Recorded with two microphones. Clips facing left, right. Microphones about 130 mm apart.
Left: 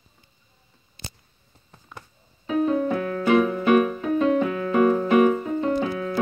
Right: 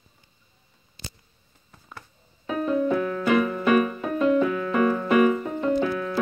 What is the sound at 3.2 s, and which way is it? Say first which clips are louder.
Keyboard: left 4 dB; 35° left (ahead or behind).